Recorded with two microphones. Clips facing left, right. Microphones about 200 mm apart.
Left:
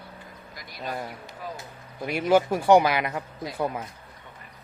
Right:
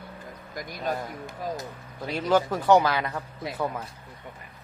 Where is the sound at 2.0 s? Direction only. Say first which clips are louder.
Left 2 dB; 10° left (ahead or behind).